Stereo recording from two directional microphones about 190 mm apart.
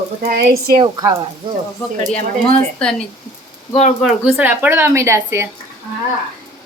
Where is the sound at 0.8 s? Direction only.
20° right (ahead or behind).